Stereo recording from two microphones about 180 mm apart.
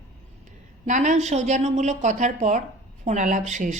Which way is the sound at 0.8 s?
45° right (ahead or behind).